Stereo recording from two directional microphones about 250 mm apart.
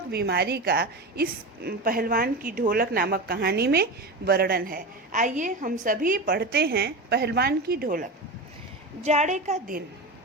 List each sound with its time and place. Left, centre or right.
0.1 s a woman's voice: right
9.0 s a woman's voice: right